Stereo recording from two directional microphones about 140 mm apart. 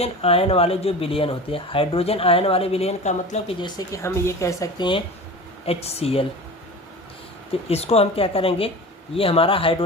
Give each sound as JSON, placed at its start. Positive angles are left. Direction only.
{"t": 0.0, "sound": "speech", "side_deg": 45}
{"t": 3.6, "sound": "speech", "side_deg": 25}
{"t": 5.6, "sound": "speech", "side_deg": 45}
{"t": 7.7, "sound": "speech", "side_deg": 45}